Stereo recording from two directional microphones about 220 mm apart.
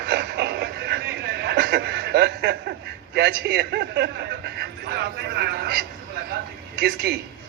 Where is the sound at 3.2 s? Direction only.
50° right (ahead or behind).